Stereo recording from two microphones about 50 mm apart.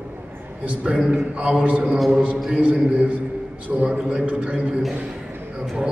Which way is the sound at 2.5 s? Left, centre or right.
Right.